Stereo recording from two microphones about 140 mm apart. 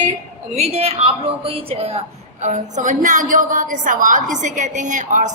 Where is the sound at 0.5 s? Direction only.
50° right (ahead or behind).